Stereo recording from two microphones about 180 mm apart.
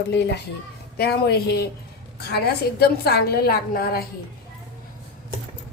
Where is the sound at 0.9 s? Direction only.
60° left (ahead or behind).